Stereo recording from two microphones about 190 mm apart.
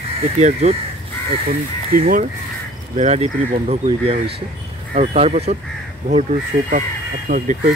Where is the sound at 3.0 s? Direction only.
35° right (ahead or behind).